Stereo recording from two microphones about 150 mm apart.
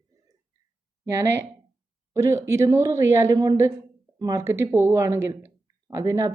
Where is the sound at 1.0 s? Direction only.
20° right (ahead or behind).